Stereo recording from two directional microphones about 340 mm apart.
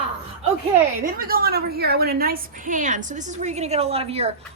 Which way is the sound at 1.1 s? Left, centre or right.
Right.